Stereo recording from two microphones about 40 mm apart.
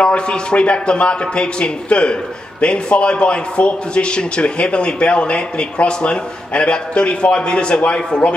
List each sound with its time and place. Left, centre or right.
0.0 s a man's voice: left